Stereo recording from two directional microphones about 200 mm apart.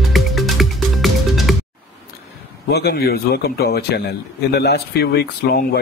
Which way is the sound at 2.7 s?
55° left (ahead or behind).